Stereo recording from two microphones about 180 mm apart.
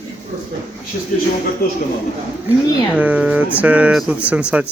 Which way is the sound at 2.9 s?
10° right (ahead or behind).